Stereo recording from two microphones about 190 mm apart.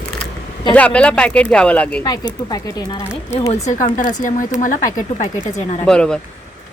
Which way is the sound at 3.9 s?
45° left (ahead or behind).